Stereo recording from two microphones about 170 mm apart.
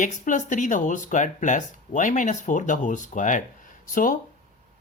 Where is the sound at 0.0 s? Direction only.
50° left (ahead or behind).